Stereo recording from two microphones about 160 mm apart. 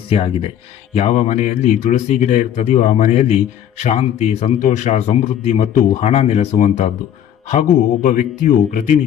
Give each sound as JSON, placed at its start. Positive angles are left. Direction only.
{"t": 0.1, "sound": "speech", "side_deg": 40}